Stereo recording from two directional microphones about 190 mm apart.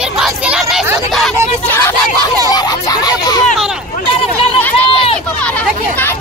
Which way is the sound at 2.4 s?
20° left (ahead or behind).